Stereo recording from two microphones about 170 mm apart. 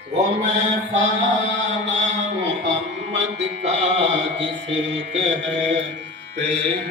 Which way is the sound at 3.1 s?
40° right (ahead or behind).